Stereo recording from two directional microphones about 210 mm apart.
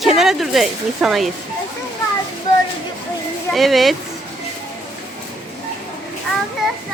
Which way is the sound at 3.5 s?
Centre (ahead or behind).